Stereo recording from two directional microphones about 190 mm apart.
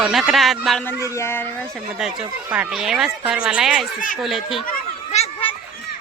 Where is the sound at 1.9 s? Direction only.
5° right (ahead or behind).